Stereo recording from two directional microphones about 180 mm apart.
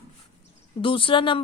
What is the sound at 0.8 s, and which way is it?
Speech, 30° left (ahead or behind).